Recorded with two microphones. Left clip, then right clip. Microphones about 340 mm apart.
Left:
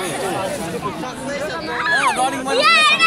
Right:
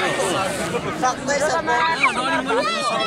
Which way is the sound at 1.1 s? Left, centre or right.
Centre.